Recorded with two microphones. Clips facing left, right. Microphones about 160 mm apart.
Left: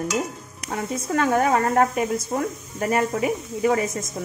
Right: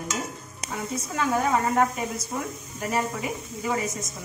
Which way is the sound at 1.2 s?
60° left (ahead or behind).